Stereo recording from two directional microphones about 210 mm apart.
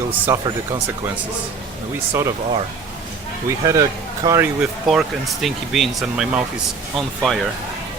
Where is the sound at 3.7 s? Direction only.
15° right (ahead or behind).